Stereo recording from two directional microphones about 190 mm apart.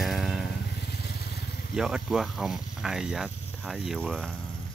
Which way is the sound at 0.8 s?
60° left (ahead or behind).